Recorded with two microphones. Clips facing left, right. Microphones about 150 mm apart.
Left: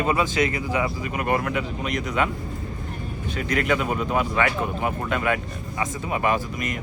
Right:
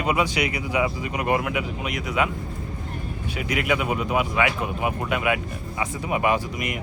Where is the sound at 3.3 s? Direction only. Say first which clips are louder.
Left 1 dB; 10° right (ahead or behind).